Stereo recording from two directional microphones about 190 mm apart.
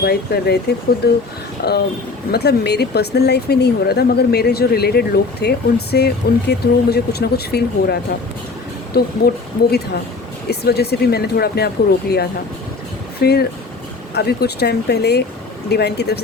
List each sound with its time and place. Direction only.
0.0 s speech: 60° left (ahead or behind)
8.9 s speech: 55° left (ahead or behind)
10.5 s speech: 55° left (ahead or behind)